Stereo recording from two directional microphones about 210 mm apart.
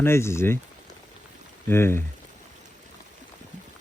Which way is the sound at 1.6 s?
10° left (ahead or behind).